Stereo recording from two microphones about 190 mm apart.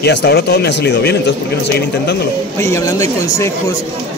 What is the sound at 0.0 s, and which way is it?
Speech, 60° left (ahead or behind).